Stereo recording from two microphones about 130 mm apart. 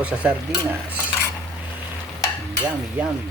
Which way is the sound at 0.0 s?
10° right (ahead or behind).